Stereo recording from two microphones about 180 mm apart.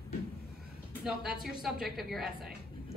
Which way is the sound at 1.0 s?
5° right (ahead or behind).